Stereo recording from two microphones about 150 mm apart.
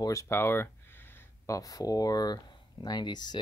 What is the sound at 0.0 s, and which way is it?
Speech, 20° left (ahead or behind).